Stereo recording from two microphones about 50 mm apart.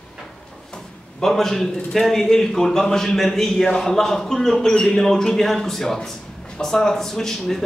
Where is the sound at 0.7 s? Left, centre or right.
Centre.